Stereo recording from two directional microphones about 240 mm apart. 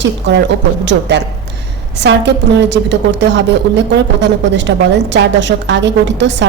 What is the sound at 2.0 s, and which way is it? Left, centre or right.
Speech, right.